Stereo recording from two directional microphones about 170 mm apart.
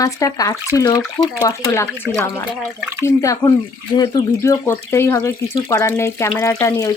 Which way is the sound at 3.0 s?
20° left (ahead or behind).